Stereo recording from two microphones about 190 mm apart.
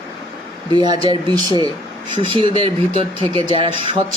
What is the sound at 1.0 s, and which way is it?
Speech, 20° right (ahead or behind).